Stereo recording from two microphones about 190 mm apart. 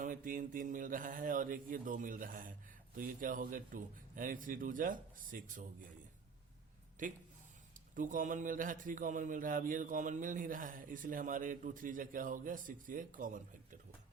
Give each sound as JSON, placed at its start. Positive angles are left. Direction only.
{"t": 0.0, "sound": "a man's voice", "side_deg": -45}
{"t": 7.0, "sound": "a man's voice", "side_deg": -40}